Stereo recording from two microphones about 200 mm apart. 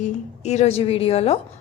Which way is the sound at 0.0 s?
35° left (ahead or behind).